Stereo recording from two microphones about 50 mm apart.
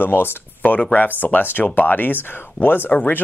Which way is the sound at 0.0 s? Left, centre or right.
Left.